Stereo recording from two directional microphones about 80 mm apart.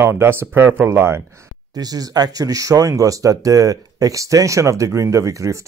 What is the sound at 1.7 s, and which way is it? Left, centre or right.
Speech, right.